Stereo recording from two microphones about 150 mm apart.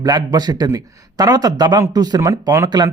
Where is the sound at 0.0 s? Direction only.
25° right (ahead or behind).